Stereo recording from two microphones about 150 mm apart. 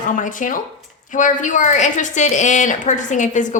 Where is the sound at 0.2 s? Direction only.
60° left (ahead or behind).